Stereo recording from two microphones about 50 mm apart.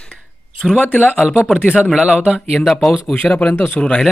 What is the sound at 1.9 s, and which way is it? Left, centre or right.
Speech, centre.